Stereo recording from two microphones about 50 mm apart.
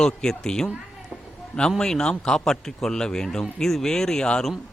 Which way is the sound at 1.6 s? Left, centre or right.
Centre.